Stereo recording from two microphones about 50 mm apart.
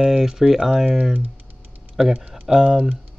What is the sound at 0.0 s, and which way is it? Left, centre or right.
Speech, centre.